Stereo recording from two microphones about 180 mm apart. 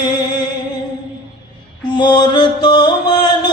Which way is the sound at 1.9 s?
25° left (ahead or behind).